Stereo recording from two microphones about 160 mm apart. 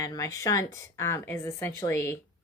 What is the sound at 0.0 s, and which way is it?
A woman's voice, 20° left (ahead or behind).